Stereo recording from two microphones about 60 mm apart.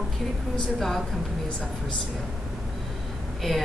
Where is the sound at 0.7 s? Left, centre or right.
Centre.